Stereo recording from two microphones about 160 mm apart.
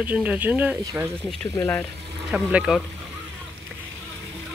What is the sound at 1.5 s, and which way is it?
Speech, 15° left (ahead or behind).